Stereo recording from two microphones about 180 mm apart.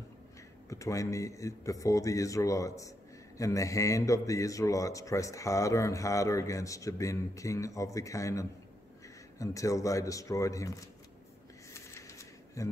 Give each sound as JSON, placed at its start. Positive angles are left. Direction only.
{"t": 0.7, "sound": "a man's voice", "side_deg": 15}
{"t": 11.7, "sound": "shuffling cards", "side_deg": 15}